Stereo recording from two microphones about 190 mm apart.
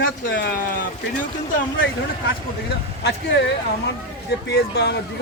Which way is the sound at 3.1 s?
60° left (ahead or behind).